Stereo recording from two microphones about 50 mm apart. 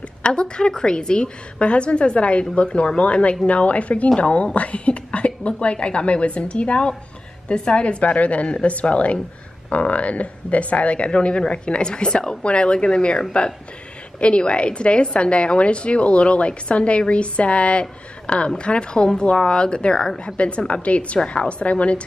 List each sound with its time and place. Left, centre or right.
0.2 s a woman's voice: centre
14.2 s a woman's voice: left